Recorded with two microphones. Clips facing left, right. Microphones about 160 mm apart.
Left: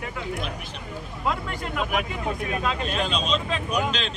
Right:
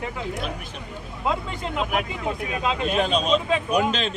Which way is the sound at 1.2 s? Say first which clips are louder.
Right 2 dB; 25° right (ahead or behind).